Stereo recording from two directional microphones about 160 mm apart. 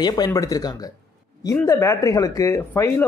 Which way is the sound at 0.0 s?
25° left (ahead or behind).